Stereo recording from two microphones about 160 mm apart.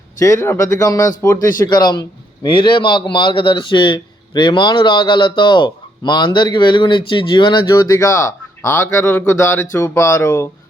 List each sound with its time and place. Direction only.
0.2 s a man's voice: 15° left (ahead or behind)